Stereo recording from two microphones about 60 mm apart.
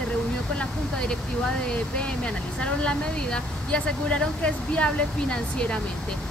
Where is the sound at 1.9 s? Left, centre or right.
Centre.